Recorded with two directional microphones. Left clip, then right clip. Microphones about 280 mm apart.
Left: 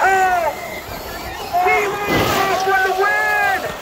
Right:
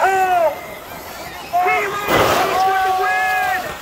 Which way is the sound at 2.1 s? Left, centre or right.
Centre.